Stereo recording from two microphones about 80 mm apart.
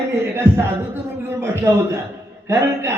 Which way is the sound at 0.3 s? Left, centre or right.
Right.